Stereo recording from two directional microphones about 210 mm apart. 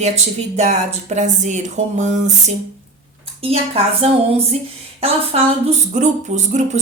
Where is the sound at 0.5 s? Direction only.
30° right (ahead or behind).